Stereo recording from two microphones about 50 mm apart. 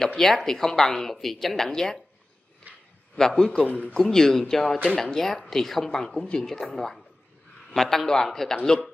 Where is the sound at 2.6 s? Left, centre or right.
Right.